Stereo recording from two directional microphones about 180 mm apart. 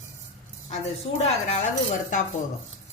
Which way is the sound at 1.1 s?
35° left (ahead or behind).